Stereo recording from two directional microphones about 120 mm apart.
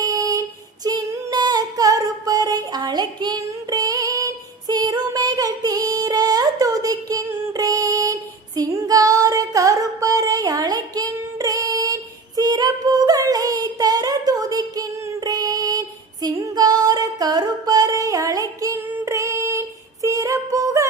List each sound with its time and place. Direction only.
0.0 s child singing: 30° right (ahead or behind)
0.9 s female singing: 30° right (ahead or behind)
12.4 s a sound: 30° right (ahead or behind)
16.2 s female singing: 35° right (ahead or behind)